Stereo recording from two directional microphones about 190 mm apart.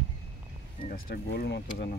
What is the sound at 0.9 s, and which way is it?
Speech, 55° left (ahead or behind).